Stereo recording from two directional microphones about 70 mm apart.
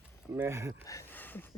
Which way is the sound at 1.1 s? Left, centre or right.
Left.